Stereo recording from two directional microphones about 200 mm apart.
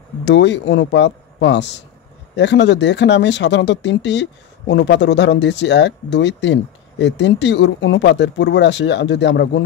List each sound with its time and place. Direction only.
0.2 s speech: 60° left (ahead or behind)